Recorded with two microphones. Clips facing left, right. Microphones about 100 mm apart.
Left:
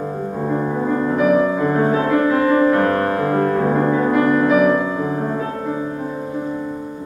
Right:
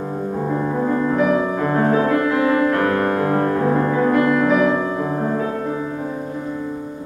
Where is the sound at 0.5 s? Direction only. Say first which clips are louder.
Left 1 dB; 10° left (ahead or behind).